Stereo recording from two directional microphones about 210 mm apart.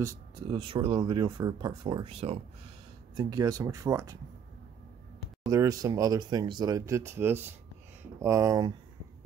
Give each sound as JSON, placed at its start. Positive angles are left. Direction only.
{"t": 0.0, "sound": "speech", "side_deg": -20}
{"t": 5.5, "sound": "speech", "side_deg": -15}